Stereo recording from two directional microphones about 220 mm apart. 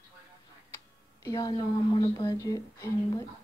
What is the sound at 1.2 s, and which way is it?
A woman's voice, 15° left (ahead or behind).